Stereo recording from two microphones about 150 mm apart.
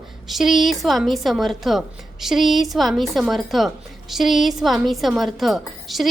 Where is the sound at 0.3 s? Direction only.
Centre (ahead or behind).